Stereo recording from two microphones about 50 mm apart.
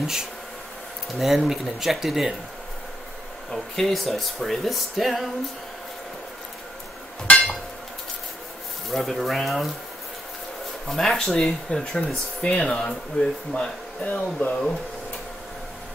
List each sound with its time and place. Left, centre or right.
0.0 s speech: centre
3.5 s speech: centre
7.3 s chink: left
9.2 s speech: centre
10.9 s speech: centre
12.4 s speech: left
14.0 s speech: left